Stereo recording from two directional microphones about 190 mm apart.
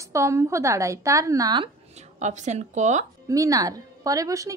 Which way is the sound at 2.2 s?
40° right (ahead or behind).